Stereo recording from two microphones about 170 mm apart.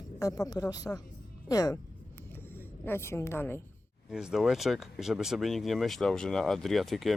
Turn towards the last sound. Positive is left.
turn(degrees=0)  # may be behind; listen again after turning